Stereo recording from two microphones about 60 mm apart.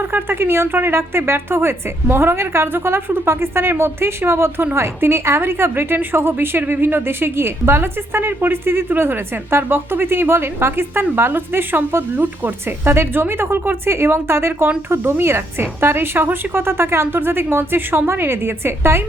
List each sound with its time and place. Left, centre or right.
0.0 s a woman's voice: right